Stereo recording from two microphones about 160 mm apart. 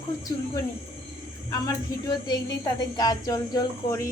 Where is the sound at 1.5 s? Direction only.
25° left (ahead or behind).